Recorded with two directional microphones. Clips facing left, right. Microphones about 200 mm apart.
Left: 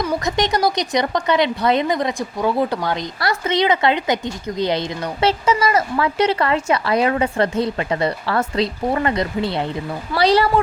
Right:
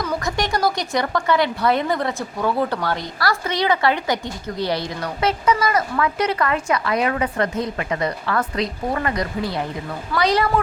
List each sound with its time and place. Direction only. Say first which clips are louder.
0.3 s a woman's voice: left 2 dB; 20° left (ahead or behind)